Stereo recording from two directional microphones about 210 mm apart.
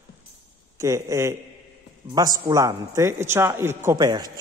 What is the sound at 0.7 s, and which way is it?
A man's voice, 15° right (ahead or behind).